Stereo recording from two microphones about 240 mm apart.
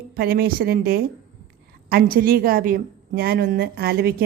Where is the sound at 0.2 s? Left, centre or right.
Right.